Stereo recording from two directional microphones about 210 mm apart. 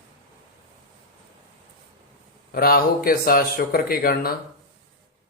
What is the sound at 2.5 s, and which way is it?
Speech, 45° left (ahead or behind).